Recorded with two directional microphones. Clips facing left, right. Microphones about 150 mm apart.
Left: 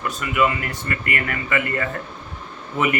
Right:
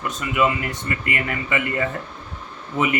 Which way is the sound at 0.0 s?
20° right (ahead or behind).